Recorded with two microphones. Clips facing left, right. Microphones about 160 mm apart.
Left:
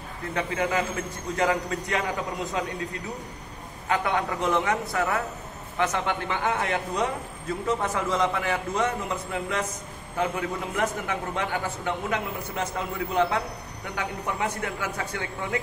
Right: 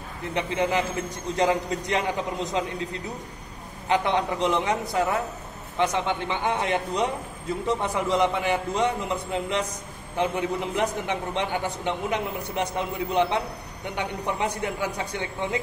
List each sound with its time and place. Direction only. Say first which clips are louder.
0.3 s a man's voice: right 2 dB; 25° right (ahead or behind)
3.9 s a man's voice: right 2 dB; 25° right (ahead or behind)